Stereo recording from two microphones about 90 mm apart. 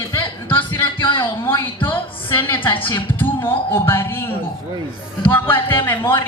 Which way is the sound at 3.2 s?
25° left (ahead or behind).